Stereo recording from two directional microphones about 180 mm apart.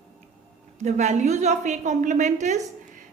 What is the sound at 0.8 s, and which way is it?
A woman's voice, 40° right (ahead or behind).